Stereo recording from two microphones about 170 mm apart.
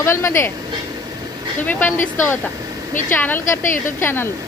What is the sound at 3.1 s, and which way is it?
Speech, 10° left (ahead or behind).